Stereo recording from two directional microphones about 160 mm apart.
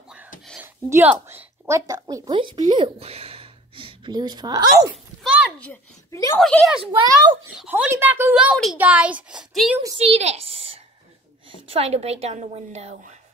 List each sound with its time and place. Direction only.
0.6 s a woman's voice: 10° right (ahead or behind)
6.4 s speech: 5° left (ahead or behind)
6.8 s a child's voice: 30° right (ahead or behind)
7.5 s a woman's voice: 10° right (ahead or behind)
9.9 s a sound: 40° right (ahead or behind)
11.6 s a woman's voice: 40° right (ahead or behind)